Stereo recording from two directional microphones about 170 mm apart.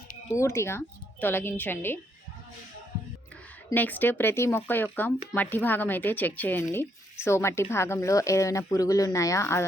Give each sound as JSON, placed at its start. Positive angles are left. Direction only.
{"t": 0.3, "sound": "speech", "side_deg": 15}
{"t": 3.7, "sound": "speech", "side_deg": 10}